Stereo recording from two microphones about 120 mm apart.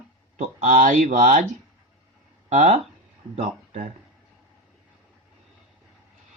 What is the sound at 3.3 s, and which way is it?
Speech, 65° right (ahead or behind).